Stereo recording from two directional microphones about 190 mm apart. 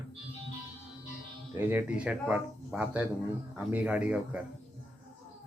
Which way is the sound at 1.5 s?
10° right (ahead or behind).